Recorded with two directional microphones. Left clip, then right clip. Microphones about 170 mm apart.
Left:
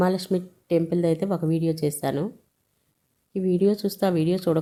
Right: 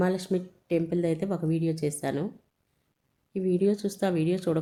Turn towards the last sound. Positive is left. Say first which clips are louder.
# left 4 dB
turn(degrees=15)  # may be behind; listen again after turning